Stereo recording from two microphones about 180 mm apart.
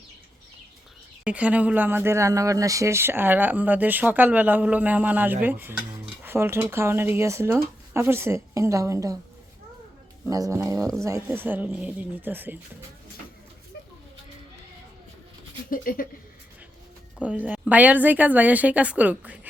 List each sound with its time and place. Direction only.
1.2 s speech: 5° right (ahead or behind)
10.2 s speech: 20° right (ahead or behind)
15.7 s speech: 50° left (ahead or behind)
17.2 s speech: 10° right (ahead or behind)